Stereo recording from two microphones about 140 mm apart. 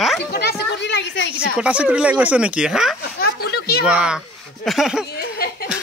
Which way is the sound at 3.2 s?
90° left.